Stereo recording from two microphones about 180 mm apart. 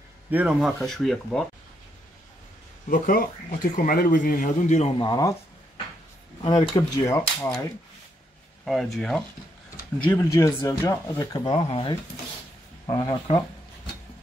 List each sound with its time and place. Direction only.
0.3 s speech: 5° right (ahead or behind)
2.9 s a man's voice: 55° left (ahead or behind)
4.9 s speech: 25° left (ahead or behind)
6.4 s speech: 20° left (ahead or behind)
8.6 s speech: centre (ahead or behind)
10.1 s speech: 15° left (ahead or behind)